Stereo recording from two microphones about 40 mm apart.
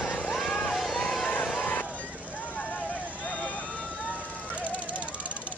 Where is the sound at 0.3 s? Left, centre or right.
Centre.